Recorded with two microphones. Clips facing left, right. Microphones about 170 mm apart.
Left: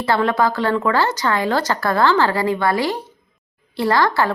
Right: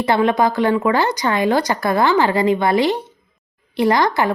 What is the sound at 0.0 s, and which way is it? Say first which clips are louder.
A woman's voice: right 2 dB; 20° right (ahead or behind).